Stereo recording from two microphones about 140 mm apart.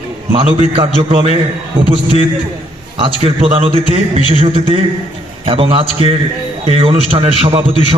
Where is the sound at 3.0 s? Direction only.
40° right (ahead or behind).